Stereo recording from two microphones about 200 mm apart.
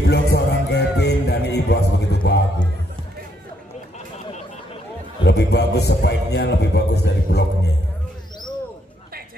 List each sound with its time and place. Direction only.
0.0 s music: 55° left (ahead or behind)
5.2 s a man's voice: 55° left (ahead or behind)